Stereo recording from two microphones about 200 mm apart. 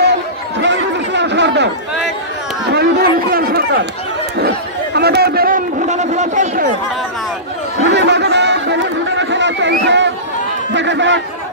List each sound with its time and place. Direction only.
0.6 s chatter: 60° right (ahead or behind)
2.7 s chatter: 55° right (ahead or behind)
3.3 s run: 50° right (ahead or behind)
4.4 s a sound: 55° right (ahead or behind)
7.8 s chatter: 60° right (ahead or behind)
10.7 s a sound: 65° right (ahead or behind)